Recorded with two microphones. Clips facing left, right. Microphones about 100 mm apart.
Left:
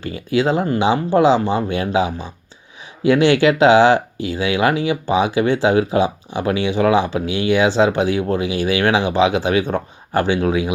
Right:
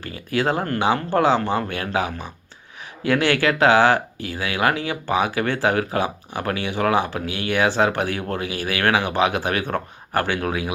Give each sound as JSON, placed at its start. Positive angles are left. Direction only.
{"t": 0.3, "sound": "speech", "side_deg": 20}